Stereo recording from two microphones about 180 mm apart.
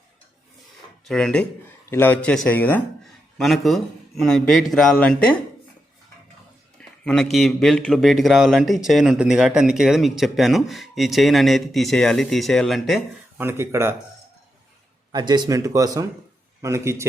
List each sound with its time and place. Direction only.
1.0 s a man's voice: 5° left (ahead or behind)
6.7 s a man's voice: 5° left (ahead or behind)
13.4 s speech: 15° right (ahead or behind)
15.1 s speech: 25° right (ahead or behind)